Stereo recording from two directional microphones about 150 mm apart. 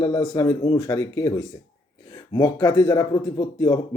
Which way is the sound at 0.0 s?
25° left (ahead or behind).